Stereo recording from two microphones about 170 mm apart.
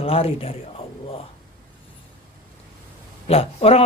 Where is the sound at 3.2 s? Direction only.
35° left (ahead or behind).